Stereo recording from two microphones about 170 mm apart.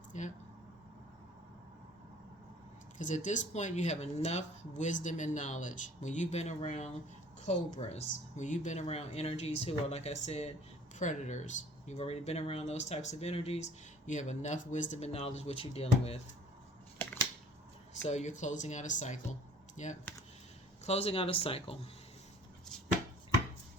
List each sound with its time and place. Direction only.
0.1 s speech: 45° left (ahead or behind)
3.0 s speech: 45° left (ahead or behind)
18.1 s speech: 45° left (ahead or behind)